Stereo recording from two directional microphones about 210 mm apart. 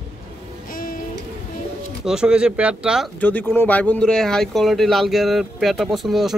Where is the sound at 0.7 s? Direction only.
40° left (ahead or behind).